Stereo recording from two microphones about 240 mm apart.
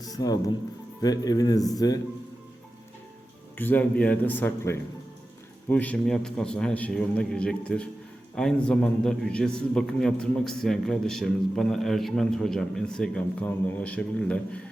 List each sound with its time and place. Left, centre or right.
0.0 s speech: centre
3.6 s a man's voice: centre